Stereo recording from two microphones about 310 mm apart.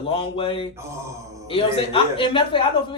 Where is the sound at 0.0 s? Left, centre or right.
Centre.